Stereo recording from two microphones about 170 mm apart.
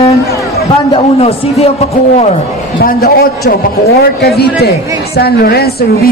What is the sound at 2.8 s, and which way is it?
A man's voice, 60° left (ahead or behind).